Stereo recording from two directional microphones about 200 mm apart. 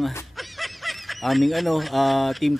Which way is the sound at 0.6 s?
Centre (ahead or behind).